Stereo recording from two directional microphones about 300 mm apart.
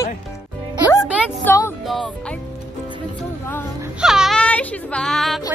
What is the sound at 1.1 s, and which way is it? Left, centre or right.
Music, centre.